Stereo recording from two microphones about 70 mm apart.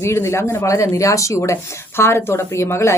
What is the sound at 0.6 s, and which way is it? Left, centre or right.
Speech, left.